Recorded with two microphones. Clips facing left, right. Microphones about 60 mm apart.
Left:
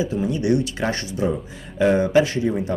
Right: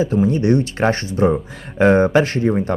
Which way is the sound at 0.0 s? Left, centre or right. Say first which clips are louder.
Right 6 dB; right.